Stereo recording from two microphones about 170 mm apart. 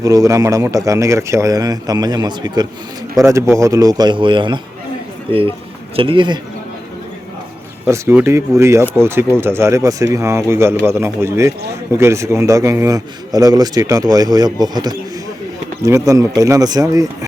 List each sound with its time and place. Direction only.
0.0 s a man's voice: 20° right (ahead or behind)
7.9 s a man's voice: 15° right (ahead or behind)